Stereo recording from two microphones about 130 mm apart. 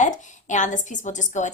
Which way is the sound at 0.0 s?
70° left (ahead or behind).